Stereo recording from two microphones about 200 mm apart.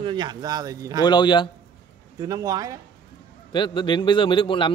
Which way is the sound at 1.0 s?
20° left (ahead or behind).